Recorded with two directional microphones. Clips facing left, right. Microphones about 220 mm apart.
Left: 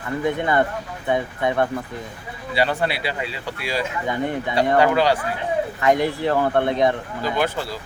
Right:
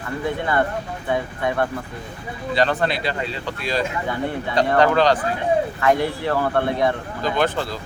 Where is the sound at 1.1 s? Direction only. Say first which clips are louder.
Left 1 dB; 20° left (ahead or behind).